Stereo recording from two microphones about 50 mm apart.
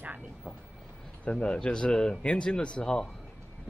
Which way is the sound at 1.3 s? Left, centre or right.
Left.